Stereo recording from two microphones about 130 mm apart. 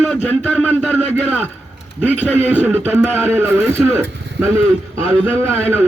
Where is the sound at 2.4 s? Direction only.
15° right (ahead or behind).